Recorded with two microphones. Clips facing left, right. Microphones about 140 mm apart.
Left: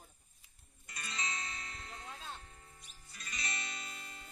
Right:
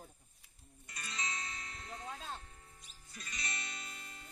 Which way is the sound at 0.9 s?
85° left.